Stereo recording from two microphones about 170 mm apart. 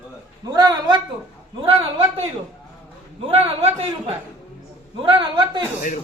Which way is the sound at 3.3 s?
40° right (ahead or behind).